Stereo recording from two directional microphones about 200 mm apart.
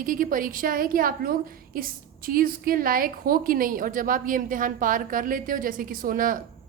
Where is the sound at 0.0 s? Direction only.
45° right (ahead or behind).